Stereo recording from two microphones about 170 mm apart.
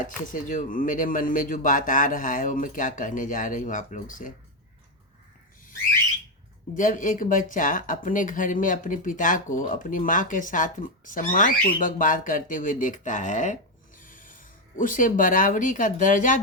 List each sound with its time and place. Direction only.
0.0 s speech: 50° left (ahead or behind)
6.7 s speech: 50° left (ahead or behind)